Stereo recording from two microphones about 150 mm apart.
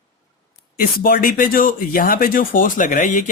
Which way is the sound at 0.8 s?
70° left (ahead or behind).